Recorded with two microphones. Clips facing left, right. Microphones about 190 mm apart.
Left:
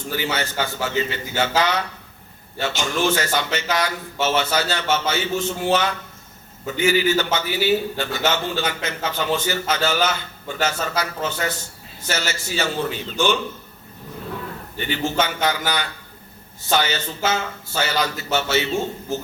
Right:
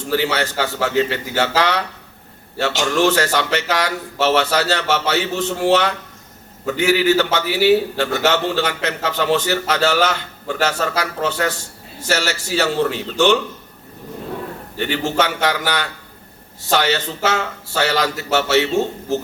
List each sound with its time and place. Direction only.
0.1 s a man's voice: 70° right (ahead or behind)
14.8 s a man's voice: 70° right (ahead or behind)